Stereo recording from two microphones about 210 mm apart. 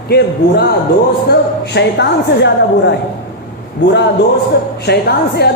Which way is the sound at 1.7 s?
55° left (ahead or behind).